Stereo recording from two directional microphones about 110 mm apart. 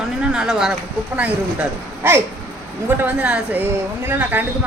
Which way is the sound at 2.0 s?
20° right (ahead or behind).